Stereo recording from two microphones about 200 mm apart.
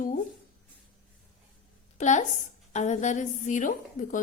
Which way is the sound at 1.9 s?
35° left (ahead or behind).